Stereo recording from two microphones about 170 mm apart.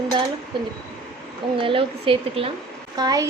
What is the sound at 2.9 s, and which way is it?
Dishes, 25° right (ahead or behind).